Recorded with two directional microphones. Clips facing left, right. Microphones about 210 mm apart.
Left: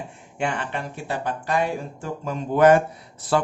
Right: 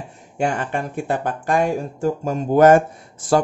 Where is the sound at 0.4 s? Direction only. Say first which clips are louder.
Right 5 dB; 45° right (ahead or behind).